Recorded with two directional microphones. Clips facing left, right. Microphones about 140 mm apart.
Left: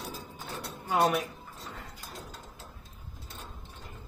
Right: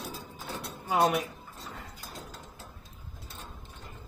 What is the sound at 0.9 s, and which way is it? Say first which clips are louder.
Speech: right 1 dB; 15° right (ahead or behind).